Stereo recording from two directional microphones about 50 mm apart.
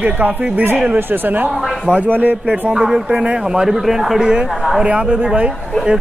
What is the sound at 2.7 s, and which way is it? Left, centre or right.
Speech, centre.